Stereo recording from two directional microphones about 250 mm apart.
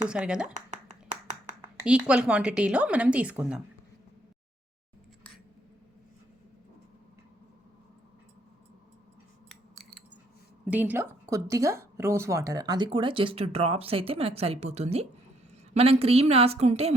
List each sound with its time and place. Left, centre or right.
0.1 s a woman's voice: centre
0.4 s a sound: right
1.7 s a woman's voice: centre
10.7 s speech: centre; by 16.9 s right